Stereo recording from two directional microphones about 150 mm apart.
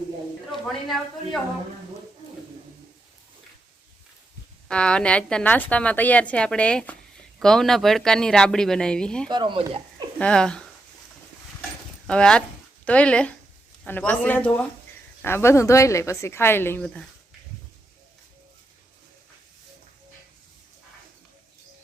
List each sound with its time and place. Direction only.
0.5 s speech: centre (ahead or behind)
4.7 s a woman's voice: 5° left (ahead or behind)
9.3 s speech: 30° right (ahead or behind)
10.2 s speech: 5° left (ahead or behind)
12.0 s a woman's voice: 5° left (ahead or behind)